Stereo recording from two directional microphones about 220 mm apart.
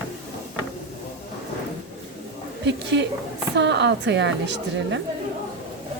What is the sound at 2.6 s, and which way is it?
A woman's voice, 50° right (ahead or behind).